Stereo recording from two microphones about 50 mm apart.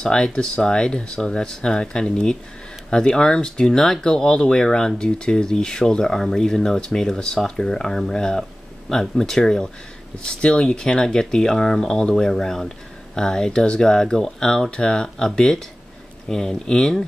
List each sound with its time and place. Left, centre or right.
0.0 s speech: centre
8.1 s a sound: centre
9.2 s speech: centre